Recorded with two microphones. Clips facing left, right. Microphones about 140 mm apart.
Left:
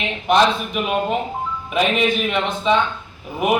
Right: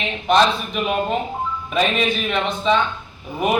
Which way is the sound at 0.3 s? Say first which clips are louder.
Even; 15° left (ahead or behind).